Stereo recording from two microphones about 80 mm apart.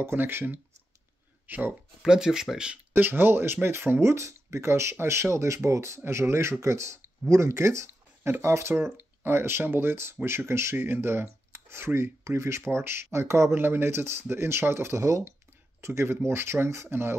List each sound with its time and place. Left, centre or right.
0.0 s speech: right
2.0 s speech: centre
2.9 s speech: right